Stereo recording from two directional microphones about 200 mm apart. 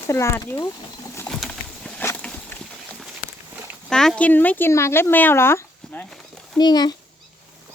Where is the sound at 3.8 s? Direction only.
5° left (ahead or behind).